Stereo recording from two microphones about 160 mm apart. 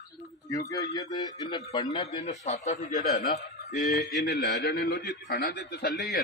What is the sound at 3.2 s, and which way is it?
Speech, 90° left.